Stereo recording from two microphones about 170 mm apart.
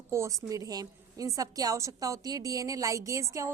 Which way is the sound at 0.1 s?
15° right (ahead or behind).